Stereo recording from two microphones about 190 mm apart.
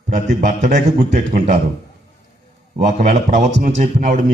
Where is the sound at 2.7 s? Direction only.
40° right (ahead or behind).